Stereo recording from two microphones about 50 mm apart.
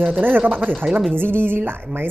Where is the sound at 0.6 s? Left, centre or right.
Right.